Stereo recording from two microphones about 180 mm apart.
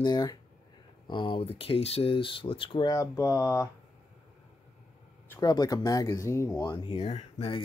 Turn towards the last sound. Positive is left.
turn(degrees=30)  # may be behind; listen again after turning